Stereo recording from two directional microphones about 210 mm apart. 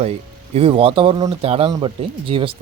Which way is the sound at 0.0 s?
30° right (ahead or behind).